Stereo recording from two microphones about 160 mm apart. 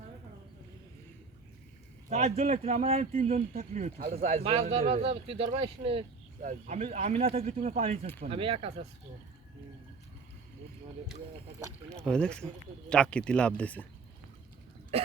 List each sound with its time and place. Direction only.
2.0 s speech: 45° right (ahead or behind)
2.4 s speech: 55° right (ahead or behind); by 6.1 s 35° right (ahead or behind)
6.4 s speech: 50° right (ahead or behind)
11.9 s speech: 5° left (ahead or behind)
14.9 s throat clearing: 40° right (ahead or behind)